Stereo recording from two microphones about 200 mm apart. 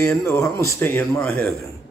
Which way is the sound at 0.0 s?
10° left (ahead or behind).